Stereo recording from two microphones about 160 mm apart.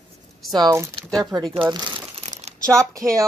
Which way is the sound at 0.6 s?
25° right (ahead or behind).